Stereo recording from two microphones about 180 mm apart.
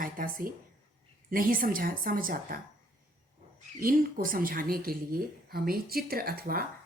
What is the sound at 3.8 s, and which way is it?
A woman's voice, 50° right (ahead or behind).